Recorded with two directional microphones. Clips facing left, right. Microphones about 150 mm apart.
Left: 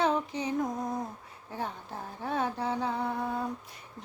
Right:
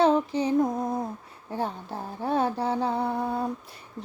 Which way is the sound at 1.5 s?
30° right (ahead or behind).